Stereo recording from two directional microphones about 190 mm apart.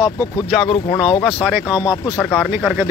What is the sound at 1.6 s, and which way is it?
Speech, 20° left (ahead or behind).